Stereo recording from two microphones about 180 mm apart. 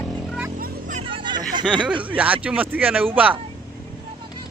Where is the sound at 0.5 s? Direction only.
45° right (ahead or behind).